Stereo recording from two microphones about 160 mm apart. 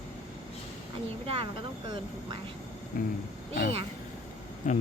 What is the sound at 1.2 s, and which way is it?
Speech, 35° right (ahead or behind).